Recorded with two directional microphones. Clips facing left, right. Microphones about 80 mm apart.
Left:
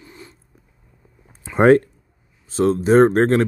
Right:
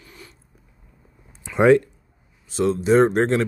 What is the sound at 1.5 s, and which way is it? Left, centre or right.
Speech, left.